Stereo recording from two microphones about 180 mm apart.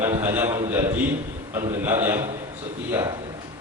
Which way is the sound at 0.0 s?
15° right (ahead or behind).